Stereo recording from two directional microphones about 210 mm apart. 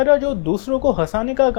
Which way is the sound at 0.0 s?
20° left (ahead or behind).